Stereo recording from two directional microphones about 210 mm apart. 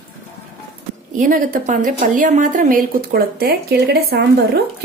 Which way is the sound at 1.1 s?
40° right (ahead or behind).